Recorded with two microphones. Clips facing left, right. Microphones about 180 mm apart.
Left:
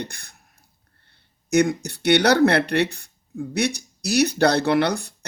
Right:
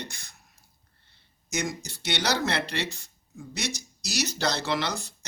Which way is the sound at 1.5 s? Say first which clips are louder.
Left 13 dB; 60° left (ahead or behind).